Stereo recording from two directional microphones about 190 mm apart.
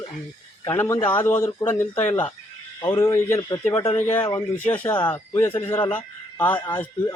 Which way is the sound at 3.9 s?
10° left (ahead or behind).